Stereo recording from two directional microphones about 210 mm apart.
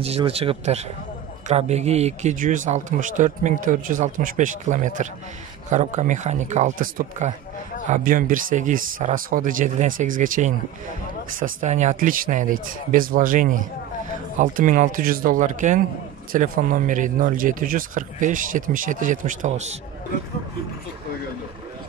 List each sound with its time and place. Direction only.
0.0 s speech: 30° right (ahead or behind)